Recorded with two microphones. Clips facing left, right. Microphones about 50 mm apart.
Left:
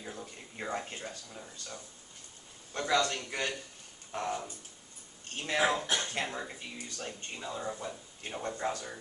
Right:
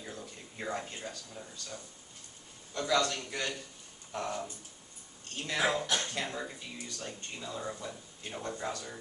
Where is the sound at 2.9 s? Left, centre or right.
Left.